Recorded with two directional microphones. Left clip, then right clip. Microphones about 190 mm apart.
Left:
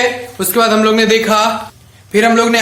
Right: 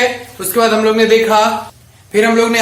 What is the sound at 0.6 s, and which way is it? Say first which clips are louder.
Speech: even; 55° left (ahead or behind).